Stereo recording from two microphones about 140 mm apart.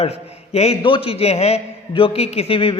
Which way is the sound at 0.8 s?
35° left (ahead or behind).